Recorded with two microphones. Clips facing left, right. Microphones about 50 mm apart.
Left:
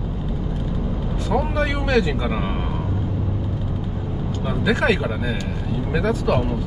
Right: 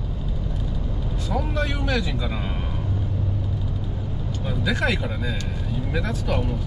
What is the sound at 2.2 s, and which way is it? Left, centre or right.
Speech, left.